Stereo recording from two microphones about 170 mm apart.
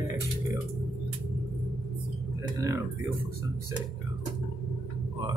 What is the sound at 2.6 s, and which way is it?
Music, 15° right (ahead or behind).